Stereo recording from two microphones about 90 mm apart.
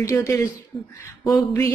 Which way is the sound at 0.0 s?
35° left (ahead or behind).